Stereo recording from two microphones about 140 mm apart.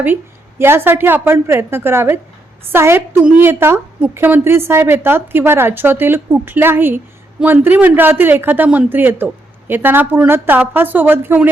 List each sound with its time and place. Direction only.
0.6 s a woman's voice: 15° right (ahead or behind)